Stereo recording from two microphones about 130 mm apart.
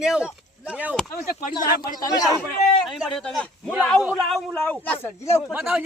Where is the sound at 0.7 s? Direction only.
10° right (ahead or behind).